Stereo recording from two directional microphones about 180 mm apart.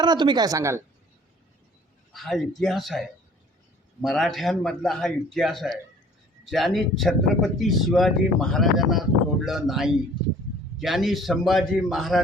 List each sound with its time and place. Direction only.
0.0 s speech: 25° right (ahead or behind)
2.1 s speech: centre (ahead or behind)